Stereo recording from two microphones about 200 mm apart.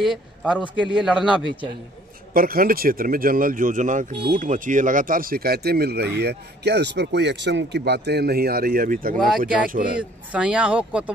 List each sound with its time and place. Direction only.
0.0 s speech: centre (ahead or behind)
2.3 s speech: 45° right (ahead or behind)
9.9 s speech: 5° right (ahead or behind)